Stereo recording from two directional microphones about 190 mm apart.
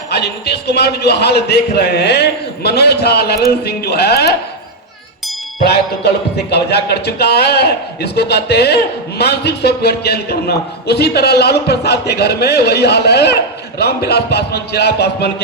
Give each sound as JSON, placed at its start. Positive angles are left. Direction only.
{"t": 0.1, "sound": "speech", "side_deg": 60}
{"t": 5.6, "sound": "speech", "side_deg": 60}